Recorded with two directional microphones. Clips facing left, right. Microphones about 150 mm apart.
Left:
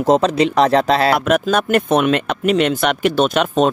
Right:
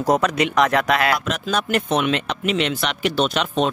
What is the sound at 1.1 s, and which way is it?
Speech, 55° left (ahead or behind).